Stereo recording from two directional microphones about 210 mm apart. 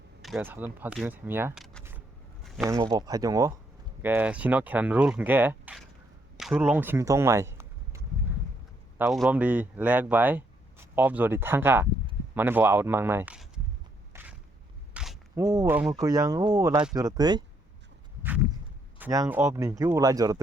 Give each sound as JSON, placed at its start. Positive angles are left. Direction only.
{"t": 0.2, "sound": "speech", "side_deg": 0}
{"t": 2.6, "sound": "speech", "side_deg": -15}
{"t": 9.0, "sound": "speech", "side_deg": 0}
{"t": 14.1, "sound": "a sound", "side_deg": -10}
{"t": 15.4, "sound": "speech", "side_deg": -15}
{"t": 18.9, "sound": "speech", "side_deg": -10}